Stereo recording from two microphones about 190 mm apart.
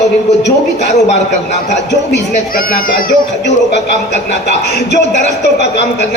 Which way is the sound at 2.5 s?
50° left (ahead or behind).